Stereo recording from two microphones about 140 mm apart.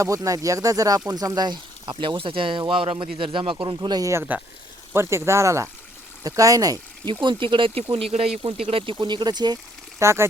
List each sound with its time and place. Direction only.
0.0 s speech: 25° right (ahead or behind)
3.8 s speech: 25° right (ahead or behind)
7.1 s speech: 35° right (ahead or behind)
10.0 s speech: 20° right (ahead or behind)